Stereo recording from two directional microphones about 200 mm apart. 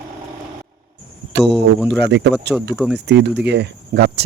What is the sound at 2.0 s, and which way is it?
Speech, 60° right (ahead or behind).